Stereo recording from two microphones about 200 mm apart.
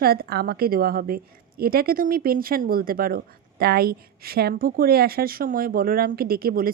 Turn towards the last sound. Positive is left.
turn(degrees=-50)  # may be behind; listen again after turning